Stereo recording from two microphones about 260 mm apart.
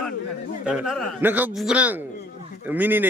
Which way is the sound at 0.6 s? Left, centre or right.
Centre.